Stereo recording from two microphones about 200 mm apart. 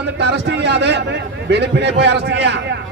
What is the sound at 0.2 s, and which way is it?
A man's voice, 60° right (ahead or behind).